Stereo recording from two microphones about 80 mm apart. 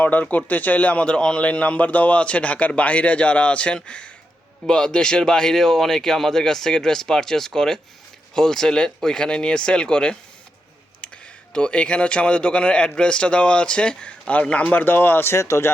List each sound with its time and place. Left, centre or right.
0.0 s a man's voice: left
11.5 s a man's voice: centre; by 15.7 s left